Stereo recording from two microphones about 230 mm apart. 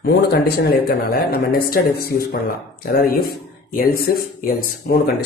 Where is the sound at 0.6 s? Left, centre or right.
Left.